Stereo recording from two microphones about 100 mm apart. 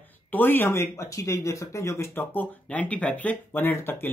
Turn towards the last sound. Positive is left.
turn(degrees=20)  # may be behind; listen again after turning